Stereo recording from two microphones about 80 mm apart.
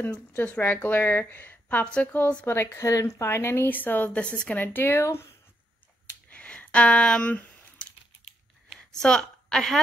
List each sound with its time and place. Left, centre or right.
0.4 s a woman's voice: left
2.4 s a woman's voice: left
2.9 s speech: left
3.3 s a woman's voice: left
6.3 s a sound: centre